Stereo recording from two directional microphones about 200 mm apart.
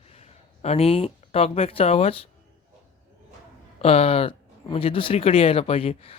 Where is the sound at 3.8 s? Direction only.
30° left (ahead or behind).